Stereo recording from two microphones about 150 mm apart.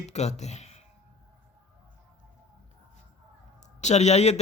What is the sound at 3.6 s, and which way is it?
Speech, 50° left (ahead or behind).